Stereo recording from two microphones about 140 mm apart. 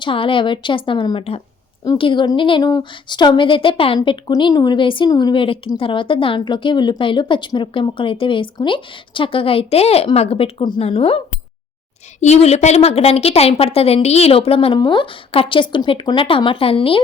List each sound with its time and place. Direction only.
0.0 s a woman's voice: 40° left (ahead or behind)
12.2 s a woman's voice: 50° left (ahead or behind)